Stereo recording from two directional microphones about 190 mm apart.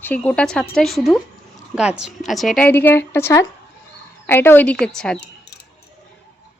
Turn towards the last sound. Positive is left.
turn(degrees=60)  # may be behind; listen again after turning